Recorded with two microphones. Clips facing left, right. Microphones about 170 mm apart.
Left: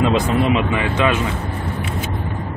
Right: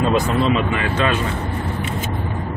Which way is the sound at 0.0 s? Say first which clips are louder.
Left 1 dB; 15° left (ahead or behind).